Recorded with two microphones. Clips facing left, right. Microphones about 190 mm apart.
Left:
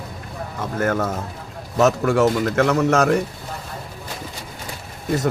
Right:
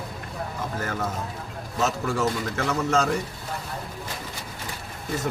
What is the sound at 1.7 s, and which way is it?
A man's voice, 75° left (ahead or behind).